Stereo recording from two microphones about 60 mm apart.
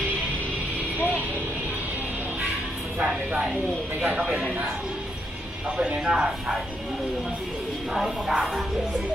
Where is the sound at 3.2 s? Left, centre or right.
Centre.